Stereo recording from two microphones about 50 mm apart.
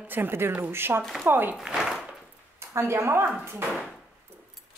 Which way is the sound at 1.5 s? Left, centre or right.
Centre.